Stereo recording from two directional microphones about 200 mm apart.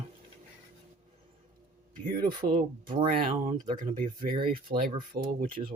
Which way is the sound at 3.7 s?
40° right (ahead or behind).